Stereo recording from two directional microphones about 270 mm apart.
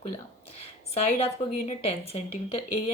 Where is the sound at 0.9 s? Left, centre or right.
Left.